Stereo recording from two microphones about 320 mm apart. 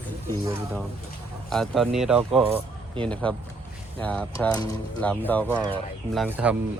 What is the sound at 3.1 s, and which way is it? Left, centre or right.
Speech, centre.